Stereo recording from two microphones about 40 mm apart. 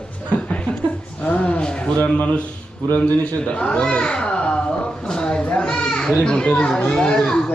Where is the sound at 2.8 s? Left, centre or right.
Left.